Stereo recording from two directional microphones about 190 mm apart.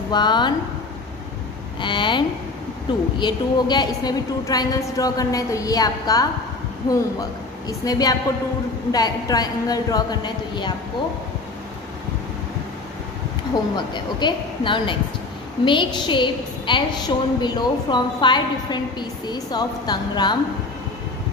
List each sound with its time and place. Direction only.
0.1 s a woman's voice: 25° left (ahead or behind)
1.8 s a woman's voice: 25° left (ahead or behind)
13.7 s a woman's voice: 25° left (ahead or behind)